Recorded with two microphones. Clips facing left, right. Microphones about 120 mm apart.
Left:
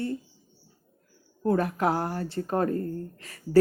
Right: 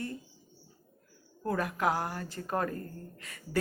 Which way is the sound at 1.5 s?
30° left (ahead or behind).